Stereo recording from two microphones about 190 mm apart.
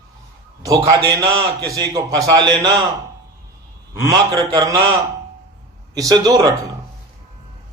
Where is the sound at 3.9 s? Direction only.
15° right (ahead or behind).